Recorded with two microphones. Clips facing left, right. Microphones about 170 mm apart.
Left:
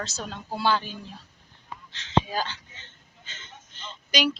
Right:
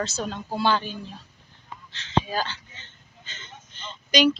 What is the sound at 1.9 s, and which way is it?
Speech, 15° left (ahead or behind).